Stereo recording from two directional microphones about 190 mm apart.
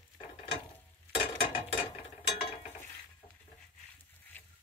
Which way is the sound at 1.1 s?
30° left (ahead or behind).